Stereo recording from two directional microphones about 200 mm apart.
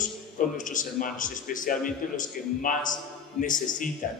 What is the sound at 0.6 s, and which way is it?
A man's voice, 40° left (ahead or behind).